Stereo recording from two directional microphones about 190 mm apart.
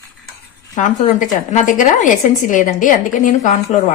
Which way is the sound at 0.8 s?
40° left (ahead or behind).